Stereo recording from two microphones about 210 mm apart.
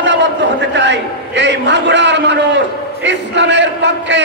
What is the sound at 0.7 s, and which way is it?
A man's voice, 55° right (ahead or behind).